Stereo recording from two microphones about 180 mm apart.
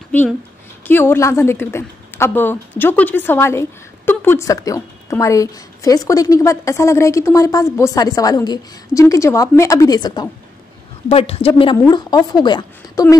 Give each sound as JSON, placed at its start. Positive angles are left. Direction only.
{"t": 0.1, "sound": "a woman's voice", "side_deg": 10}
{"t": 11.1, "sound": "a woman's voice", "side_deg": 35}